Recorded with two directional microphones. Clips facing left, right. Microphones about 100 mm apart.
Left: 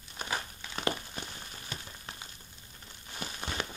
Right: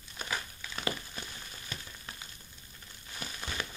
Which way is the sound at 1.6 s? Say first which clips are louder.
Left 1 dB; 30° left (ahead or behind).